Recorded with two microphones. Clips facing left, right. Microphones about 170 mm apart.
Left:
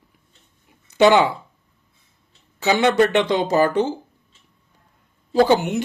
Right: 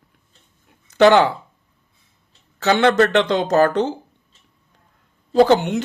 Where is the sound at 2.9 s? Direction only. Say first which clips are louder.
Right 1 dB; 10° left (ahead or behind).